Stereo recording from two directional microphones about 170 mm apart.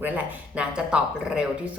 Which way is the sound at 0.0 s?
10° right (ahead or behind).